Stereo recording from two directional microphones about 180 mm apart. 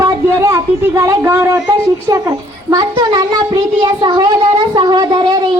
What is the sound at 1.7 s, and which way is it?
A woman's voice, 20° right (ahead or behind).